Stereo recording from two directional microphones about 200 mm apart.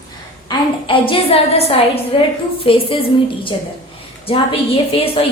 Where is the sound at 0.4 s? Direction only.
25° left (ahead or behind).